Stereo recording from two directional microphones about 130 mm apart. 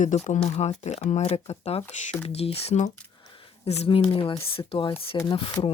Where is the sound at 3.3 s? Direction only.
50° left (ahead or behind).